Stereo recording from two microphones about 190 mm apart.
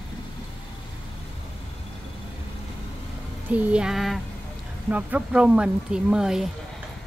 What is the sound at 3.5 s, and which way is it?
Speech, 5° right (ahead or behind).